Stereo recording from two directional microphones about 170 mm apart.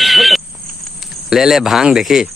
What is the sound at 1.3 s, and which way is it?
A man's voice, centre (ahead or behind).